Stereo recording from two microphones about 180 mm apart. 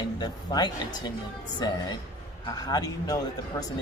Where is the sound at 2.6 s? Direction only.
20° left (ahead or behind).